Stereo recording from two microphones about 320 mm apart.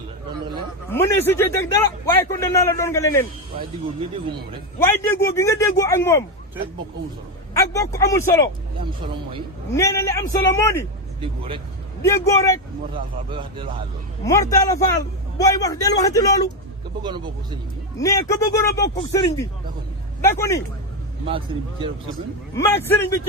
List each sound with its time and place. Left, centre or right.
0.9 s a man's voice: centre
4.8 s a man's voice: centre
7.5 s a man's voice: centre
9.7 s a man's voice: centre
11.2 s speech: centre
12.0 s a man's voice: centre
14.3 s a man's voice: centre
17.0 s speech: centre
18.0 s a man's voice: centre
21.2 s speech: centre
22.5 s a man's voice: centre